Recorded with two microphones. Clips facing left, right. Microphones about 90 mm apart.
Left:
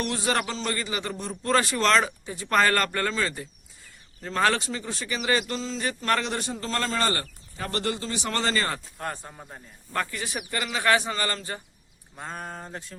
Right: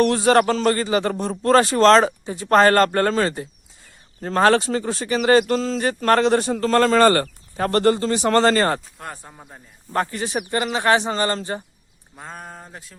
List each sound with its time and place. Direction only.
0.0 s speech: 50° right (ahead or behind)
9.0 s speech: 5° right (ahead or behind)
9.9 s speech: 35° right (ahead or behind)
12.1 s speech: centre (ahead or behind)